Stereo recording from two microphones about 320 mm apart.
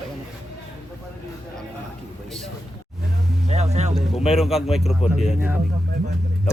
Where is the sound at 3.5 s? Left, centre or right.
Centre.